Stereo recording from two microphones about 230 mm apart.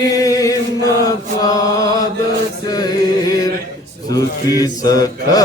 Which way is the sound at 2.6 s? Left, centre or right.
Centre.